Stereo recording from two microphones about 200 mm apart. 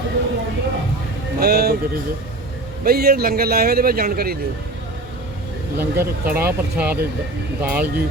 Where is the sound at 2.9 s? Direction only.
50° right (ahead or behind).